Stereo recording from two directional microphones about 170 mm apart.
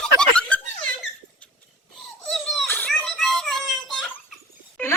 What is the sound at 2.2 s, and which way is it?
Crying, centre (ahead or behind).